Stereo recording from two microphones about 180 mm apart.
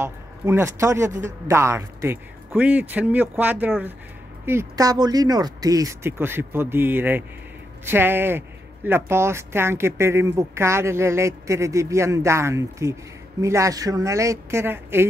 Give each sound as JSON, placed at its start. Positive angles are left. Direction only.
{"t": 0.0, "sound": "speech", "side_deg": -15}